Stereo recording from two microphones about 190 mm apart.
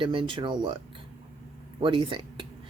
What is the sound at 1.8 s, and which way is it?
Speech, 25° right (ahead or behind).